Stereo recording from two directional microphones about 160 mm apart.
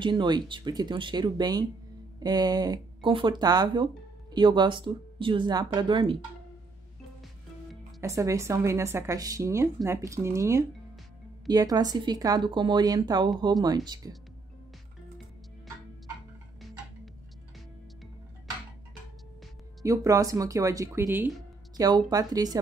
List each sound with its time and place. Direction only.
0.0 s speech: 30° right (ahead or behind)
8.0 s speech: 20° right (ahead or behind)
19.8 s speech: 20° right (ahead or behind)